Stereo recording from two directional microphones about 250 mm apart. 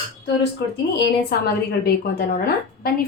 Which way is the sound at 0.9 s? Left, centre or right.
Left.